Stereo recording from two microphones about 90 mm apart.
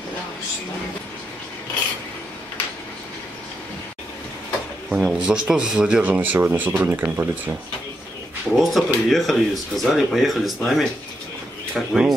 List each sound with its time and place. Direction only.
4.8 s speech: 10° right (ahead or behind)
8.5 s speech: centre (ahead or behind)